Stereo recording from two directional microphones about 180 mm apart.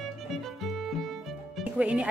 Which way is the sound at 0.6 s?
Centre (ahead or behind).